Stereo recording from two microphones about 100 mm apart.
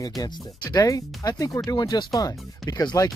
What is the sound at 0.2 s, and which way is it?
Speech, 40° left (ahead or behind).